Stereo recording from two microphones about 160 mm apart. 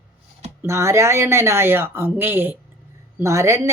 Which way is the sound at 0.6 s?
15° right (ahead or behind).